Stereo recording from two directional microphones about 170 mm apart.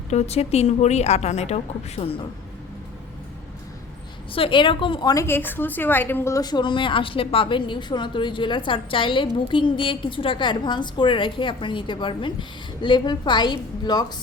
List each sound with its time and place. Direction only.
0.1 s a woman's voice: 40° left (ahead or behind)
4.3 s a woman's voice: 30° left (ahead or behind)